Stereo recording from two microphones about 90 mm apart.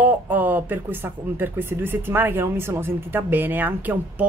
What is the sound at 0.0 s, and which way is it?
Speech, 20° right (ahead or behind).